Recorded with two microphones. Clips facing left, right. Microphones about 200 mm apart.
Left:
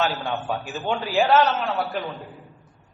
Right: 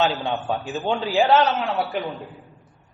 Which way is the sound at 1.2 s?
15° right (ahead or behind).